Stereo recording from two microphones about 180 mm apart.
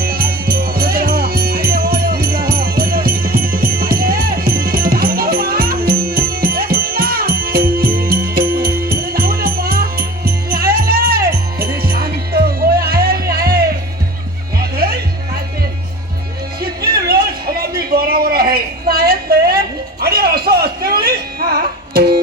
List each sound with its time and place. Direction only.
0.0 s music: 55° right (ahead or behind)
16.6 s music: 60° right (ahead or behind)
17.7 s a sound: 55° right (ahead or behind)